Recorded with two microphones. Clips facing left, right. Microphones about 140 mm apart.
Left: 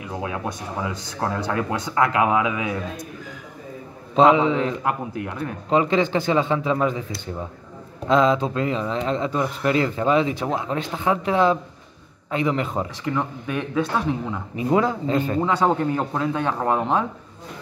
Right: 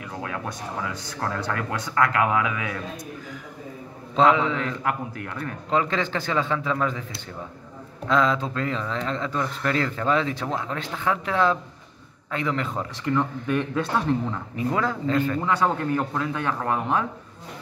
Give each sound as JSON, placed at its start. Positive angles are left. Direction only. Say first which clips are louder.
{"t": 0.0, "sound": "a man's voice", "louder": "left 4 dB", "side_deg": 20}
{"t": 4.1, "sound": "a man's voice", "louder": "left 4 dB", "side_deg": 20}
{"t": 8.1, "sound": "speech", "louder": "left 4 dB", "side_deg": 20}
{"t": 14.5, "sound": "a man's voice", "louder": "left 6 dB", "side_deg": 20}